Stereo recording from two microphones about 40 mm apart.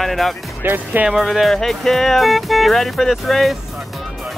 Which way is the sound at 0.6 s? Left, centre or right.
Right.